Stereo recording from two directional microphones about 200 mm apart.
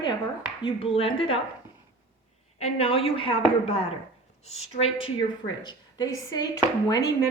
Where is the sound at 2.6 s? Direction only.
30° left (ahead or behind).